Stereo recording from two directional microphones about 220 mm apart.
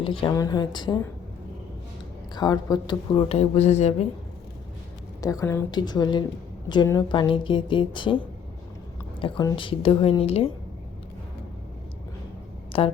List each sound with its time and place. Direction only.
0.0 s speech: 25° left (ahead or behind)
2.3 s speech: 20° left (ahead or behind)
5.2 s speech: 15° left (ahead or behind)
9.2 s speech: 20° left (ahead or behind)
12.7 s speech: 25° left (ahead or behind)